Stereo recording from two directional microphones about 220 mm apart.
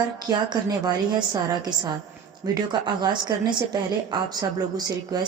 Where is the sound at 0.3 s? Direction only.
20° right (ahead or behind).